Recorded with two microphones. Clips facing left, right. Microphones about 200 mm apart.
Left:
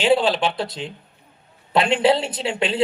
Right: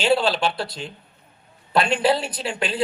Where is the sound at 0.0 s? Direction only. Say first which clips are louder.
Left 2 dB; 15° left (ahead or behind).